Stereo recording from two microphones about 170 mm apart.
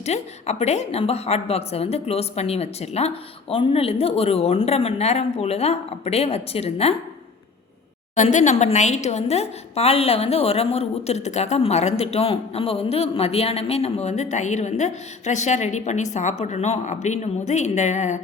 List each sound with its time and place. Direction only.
0.0 s a woman's voice: 40° left (ahead or behind)
8.1 s a woman's voice: 45° left (ahead or behind)